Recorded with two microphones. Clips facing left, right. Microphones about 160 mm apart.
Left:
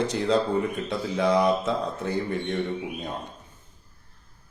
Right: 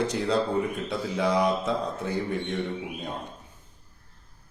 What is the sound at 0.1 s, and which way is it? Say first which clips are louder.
A man's voice: left 2 dB; 10° right (ahead or behind).